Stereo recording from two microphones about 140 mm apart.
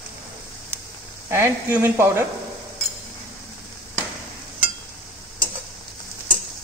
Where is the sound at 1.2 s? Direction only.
20° right (ahead or behind).